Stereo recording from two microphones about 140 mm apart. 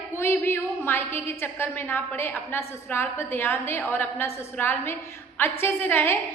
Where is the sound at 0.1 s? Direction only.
20° left (ahead or behind).